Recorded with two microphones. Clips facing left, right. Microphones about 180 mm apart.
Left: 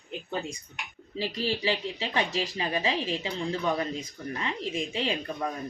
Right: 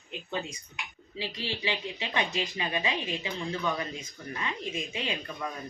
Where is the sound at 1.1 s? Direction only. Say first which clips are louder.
Left 6 dB; 40° left (ahead or behind).